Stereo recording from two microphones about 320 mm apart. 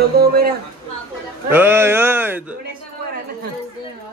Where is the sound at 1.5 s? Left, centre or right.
Centre.